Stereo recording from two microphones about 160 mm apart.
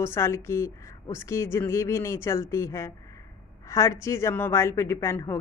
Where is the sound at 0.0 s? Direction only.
15° left (ahead or behind).